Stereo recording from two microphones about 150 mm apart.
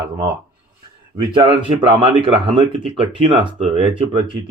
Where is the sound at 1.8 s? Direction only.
35° right (ahead or behind).